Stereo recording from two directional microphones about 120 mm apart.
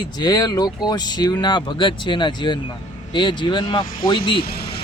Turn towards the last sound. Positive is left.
turn(degrees=45)  # may be behind; listen again after turning